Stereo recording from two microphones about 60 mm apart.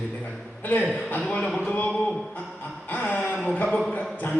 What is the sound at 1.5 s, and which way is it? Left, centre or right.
Speech, centre.